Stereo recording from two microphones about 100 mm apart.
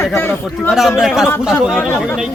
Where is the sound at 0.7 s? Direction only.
5° right (ahead or behind).